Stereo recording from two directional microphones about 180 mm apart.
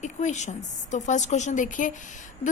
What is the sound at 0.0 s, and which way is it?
A woman's voice, 40° left (ahead or behind).